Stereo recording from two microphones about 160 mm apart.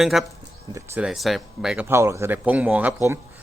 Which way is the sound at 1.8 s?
15° right (ahead or behind).